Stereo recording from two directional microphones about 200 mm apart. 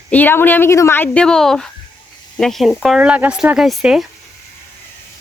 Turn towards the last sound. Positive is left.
turn(degrees=0)  # may be behind; listen again after turning